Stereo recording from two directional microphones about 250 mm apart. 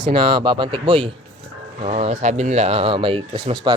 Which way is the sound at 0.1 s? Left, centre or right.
Centre.